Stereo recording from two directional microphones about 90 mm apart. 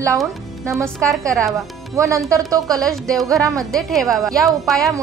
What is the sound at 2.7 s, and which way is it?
A woman's voice, 5° left (ahead or behind).